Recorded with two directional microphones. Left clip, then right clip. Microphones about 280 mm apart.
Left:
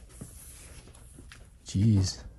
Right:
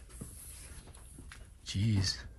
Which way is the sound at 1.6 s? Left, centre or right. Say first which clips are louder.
Left 4 dB; left.